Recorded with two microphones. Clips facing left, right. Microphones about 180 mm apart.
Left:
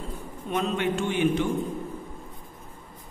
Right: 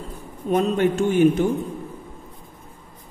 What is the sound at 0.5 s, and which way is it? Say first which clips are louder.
A man's voice: right 7 dB; 40° right (ahead or behind).